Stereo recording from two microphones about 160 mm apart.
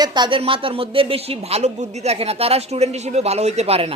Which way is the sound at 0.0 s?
25° right (ahead or behind).